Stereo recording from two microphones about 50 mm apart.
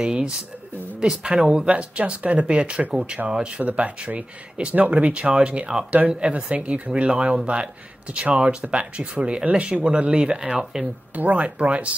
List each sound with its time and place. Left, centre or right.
0.0 s speech: centre
3.6 s speech: right; by 10.9 s centre
11.1 s speech: right